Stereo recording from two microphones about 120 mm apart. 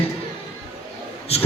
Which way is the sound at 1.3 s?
55° left (ahead or behind).